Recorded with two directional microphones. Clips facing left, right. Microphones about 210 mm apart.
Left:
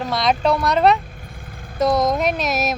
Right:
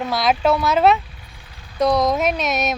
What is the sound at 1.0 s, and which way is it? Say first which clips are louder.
Vehicle: left 4 dB; 50° left (ahead or behind).